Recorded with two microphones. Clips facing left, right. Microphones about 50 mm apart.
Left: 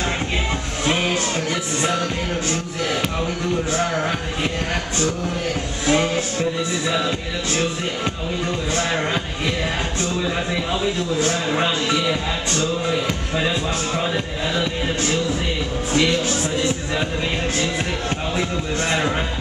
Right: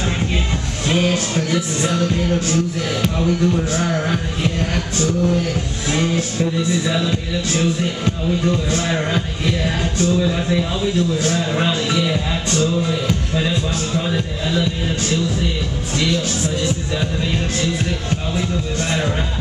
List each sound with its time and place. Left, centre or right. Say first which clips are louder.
0.8 s music: right 2 dB; centre
5.9 s music: left 1 dB; centre
15.9 s speech: left 1 dB; left